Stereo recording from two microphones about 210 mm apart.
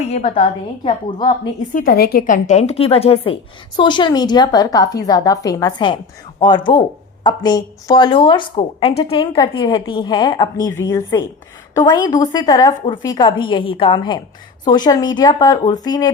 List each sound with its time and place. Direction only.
0.1 s speech: 30° left (ahead or behind)
1.7 s a woman's voice: 45° left (ahead or behind); by 16.1 s 20° left (ahead or behind)